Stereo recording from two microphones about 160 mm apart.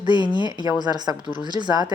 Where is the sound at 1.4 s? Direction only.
30° right (ahead or behind).